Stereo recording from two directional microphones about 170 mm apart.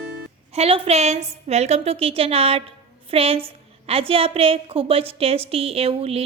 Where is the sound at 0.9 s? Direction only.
40° right (ahead or behind).